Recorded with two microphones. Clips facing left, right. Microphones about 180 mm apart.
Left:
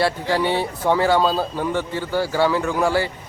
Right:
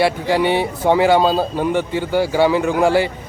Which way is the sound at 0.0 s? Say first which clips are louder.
Right 4 dB; 15° right (ahead or behind).